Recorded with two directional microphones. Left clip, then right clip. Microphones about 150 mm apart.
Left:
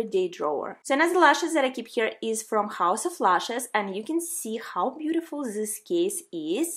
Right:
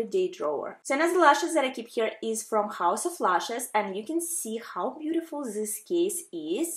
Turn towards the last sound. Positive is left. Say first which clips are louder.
# left 2 dB
turn(degrees=35)  # may be behind; listen again after turning